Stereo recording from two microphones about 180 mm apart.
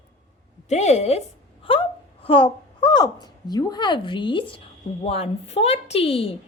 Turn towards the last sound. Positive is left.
turn(degrees=30)  # may be behind; listen again after turning